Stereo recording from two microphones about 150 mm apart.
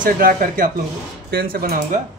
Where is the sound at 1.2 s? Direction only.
85° right.